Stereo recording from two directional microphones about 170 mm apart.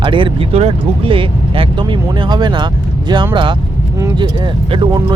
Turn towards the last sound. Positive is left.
turn(degrees=-25)  # may be behind; listen again after turning